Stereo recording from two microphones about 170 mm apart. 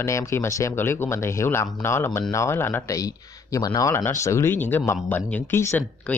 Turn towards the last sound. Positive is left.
turn(degrees=15)  # may be behind; listen again after turning